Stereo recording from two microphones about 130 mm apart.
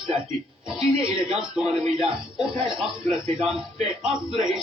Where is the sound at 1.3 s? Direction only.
5° right (ahead or behind).